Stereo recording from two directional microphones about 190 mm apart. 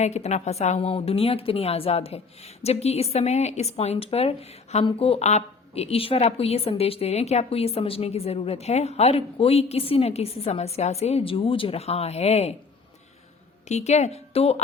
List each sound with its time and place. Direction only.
0.0 s a woman's voice: 35° left (ahead or behind)
13.7 s a woman's voice: 35° left (ahead or behind)